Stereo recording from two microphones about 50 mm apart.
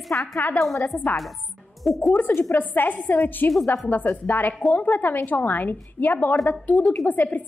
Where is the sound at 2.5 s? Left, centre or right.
Left.